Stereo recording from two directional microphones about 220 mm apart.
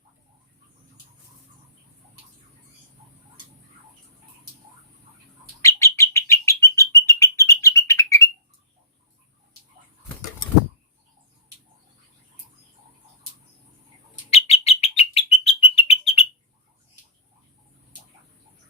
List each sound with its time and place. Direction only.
5.6 s bird: 15° left (ahead or behind)
14.3 s bird: 30° left (ahead or behind)